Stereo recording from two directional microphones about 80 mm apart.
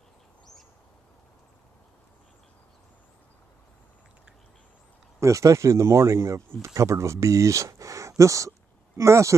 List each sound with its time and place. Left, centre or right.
5.2 s speech: right